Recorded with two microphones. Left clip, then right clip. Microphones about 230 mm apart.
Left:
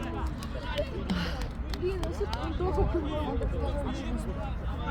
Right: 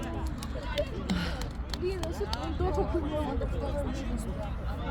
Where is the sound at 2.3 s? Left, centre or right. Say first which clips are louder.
Even; right.